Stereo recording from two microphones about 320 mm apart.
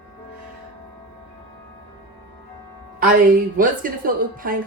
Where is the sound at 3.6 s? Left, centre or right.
Right.